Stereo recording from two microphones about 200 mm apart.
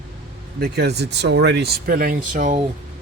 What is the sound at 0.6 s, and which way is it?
Speech, 55° right (ahead or behind).